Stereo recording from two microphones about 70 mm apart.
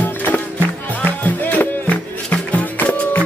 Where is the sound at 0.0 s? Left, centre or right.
Left.